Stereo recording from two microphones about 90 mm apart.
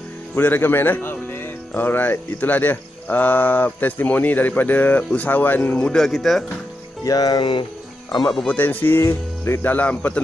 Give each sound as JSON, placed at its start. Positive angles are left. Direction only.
{"t": 0.3, "sound": "speech", "side_deg": 20}
{"t": 5.9, "sound": "speech", "side_deg": 0}
{"t": 7.1, "sound": "music", "side_deg": 45}
{"t": 8.5, "sound": "speech", "side_deg": 20}